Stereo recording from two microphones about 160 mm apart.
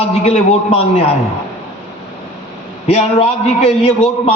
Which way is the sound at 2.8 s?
40° left (ahead or behind).